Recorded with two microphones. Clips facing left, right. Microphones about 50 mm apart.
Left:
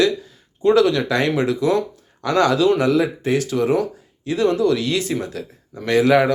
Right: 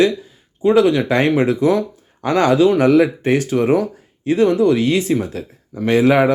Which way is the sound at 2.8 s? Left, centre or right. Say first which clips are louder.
Right 5 dB; right.